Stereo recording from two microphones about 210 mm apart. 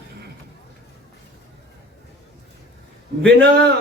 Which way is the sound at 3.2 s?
5° left (ahead or behind).